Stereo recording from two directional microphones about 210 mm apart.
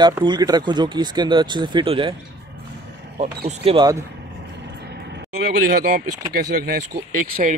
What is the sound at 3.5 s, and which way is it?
Speech, 30° right (ahead or behind).